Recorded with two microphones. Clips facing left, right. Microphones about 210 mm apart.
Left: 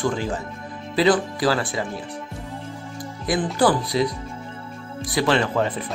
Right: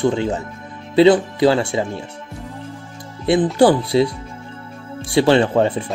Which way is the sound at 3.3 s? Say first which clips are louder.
Right 6 dB; 25° right (ahead or behind).